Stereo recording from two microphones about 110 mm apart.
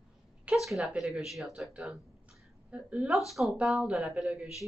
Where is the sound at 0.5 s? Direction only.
Centre (ahead or behind).